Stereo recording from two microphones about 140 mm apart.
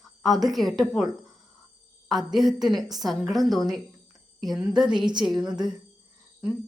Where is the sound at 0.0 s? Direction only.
Centre (ahead or behind).